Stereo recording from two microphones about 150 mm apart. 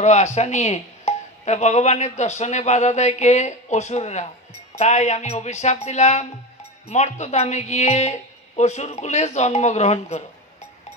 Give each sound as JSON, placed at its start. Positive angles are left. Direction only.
{"t": 0.0, "sound": "speech", "side_deg": 50}